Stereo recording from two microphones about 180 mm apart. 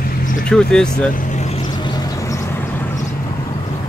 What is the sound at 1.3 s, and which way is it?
Vehicle, 40° left (ahead or behind).